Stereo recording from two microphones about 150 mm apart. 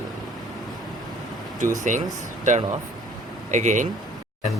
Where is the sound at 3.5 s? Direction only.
55° right (ahead or behind).